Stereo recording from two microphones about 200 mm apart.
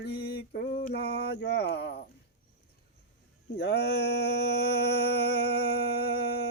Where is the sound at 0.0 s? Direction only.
50° left (ahead or behind).